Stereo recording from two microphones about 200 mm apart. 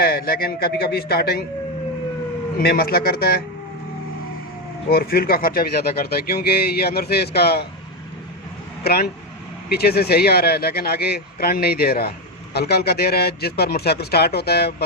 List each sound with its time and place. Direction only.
0.0 s speech: 50° left (ahead or behind)
2.6 s speech: 50° left (ahead or behind)
4.9 s speech: 50° left (ahead or behind)
8.8 s speech: 50° left (ahead or behind)